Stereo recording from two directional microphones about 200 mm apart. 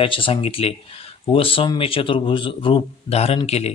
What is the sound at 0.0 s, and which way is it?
Speech, 25° left (ahead or behind).